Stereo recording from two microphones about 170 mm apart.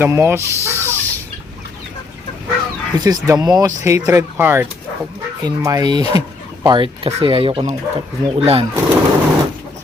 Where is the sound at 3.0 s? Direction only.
20° right (ahead or behind).